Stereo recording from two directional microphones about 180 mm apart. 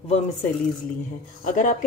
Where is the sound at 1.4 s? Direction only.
45° left (ahead or behind).